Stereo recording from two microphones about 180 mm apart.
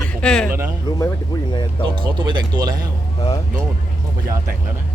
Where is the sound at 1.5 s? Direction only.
25° left (ahead or behind).